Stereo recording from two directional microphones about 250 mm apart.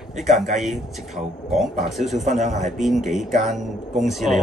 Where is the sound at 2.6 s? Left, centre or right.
Centre.